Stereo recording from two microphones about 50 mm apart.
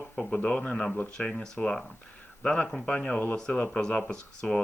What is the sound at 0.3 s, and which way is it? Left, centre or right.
Speech, left.